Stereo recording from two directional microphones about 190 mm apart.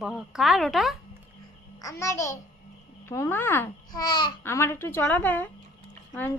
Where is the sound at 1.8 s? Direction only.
15° left (ahead or behind).